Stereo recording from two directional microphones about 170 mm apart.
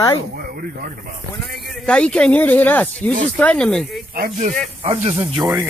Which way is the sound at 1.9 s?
5° left (ahead or behind).